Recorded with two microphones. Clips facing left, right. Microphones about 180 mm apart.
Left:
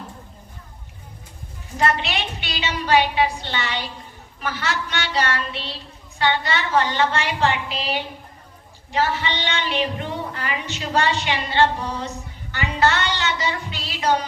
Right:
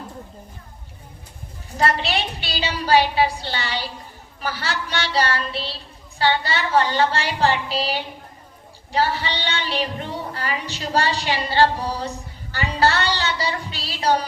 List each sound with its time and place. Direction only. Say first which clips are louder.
1.7 s child singing: right 1 dB; 35° right (ahead or behind)
8.9 s child singing: even; 35° right (ahead or behind)